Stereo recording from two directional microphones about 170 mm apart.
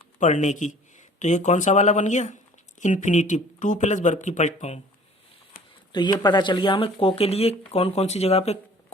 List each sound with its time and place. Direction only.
0.2 s speech: 45° left (ahead or behind)
5.5 s a sound: 60° left (ahead or behind)
5.9 s speech: 25° left (ahead or behind)